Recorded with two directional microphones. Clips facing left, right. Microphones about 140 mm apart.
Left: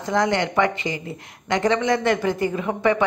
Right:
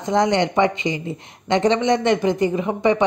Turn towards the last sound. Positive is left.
turn(degrees=-20)  # may be behind; listen again after turning